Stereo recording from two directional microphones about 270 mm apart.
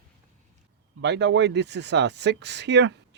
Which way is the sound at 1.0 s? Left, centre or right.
Right.